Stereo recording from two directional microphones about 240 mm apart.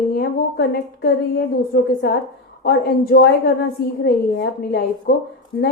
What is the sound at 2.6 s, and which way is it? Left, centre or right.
A woman's voice, left.